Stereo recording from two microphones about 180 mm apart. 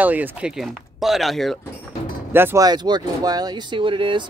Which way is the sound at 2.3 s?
15° right (ahead or behind).